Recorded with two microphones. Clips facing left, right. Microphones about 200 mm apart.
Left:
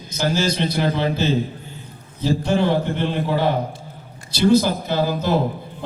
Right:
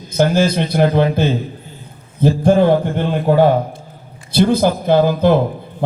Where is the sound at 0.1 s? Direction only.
55° right (ahead or behind).